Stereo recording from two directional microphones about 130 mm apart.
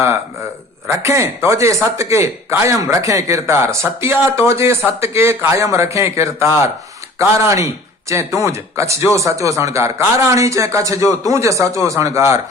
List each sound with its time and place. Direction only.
0.9 s speech: 25° right (ahead or behind)